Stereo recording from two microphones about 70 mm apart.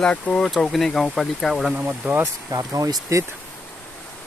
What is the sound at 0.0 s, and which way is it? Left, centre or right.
Speech, centre.